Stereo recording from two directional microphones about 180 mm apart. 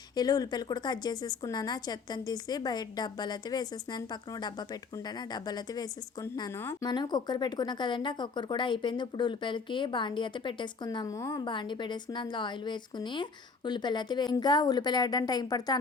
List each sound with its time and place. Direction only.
0.2 s a woman's voice: 20° left (ahead or behind)